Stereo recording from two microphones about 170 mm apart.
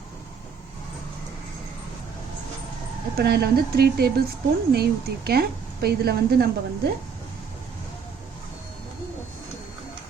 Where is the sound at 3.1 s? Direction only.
65° right (ahead or behind).